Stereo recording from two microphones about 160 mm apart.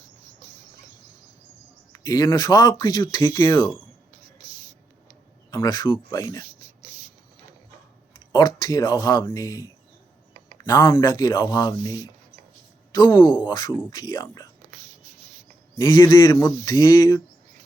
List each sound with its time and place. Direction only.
1.9 s speech: 20° left (ahead or behind)
5.5 s speech: 25° left (ahead or behind)
8.3 s speech: 25° left (ahead or behind)
15.8 s speech: 25° left (ahead or behind)